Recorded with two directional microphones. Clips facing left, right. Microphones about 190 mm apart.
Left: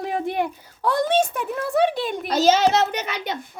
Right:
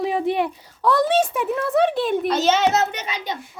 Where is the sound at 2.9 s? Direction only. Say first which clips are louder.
Left 2 dB; 50° left (ahead or behind).